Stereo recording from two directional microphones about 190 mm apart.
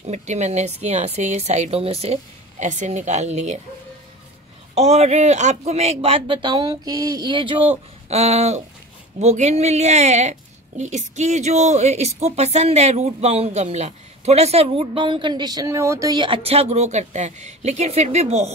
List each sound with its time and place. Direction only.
0.0 s a woman's voice: 35° right (ahead or behind)
4.7 s a woman's voice: 35° right (ahead or behind)